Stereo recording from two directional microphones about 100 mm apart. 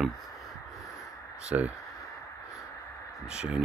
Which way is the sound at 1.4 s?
15° right (ahead or behind).